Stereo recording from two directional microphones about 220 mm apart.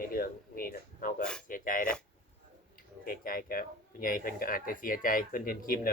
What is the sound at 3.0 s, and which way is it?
Speech, 40° left (ahead or behind).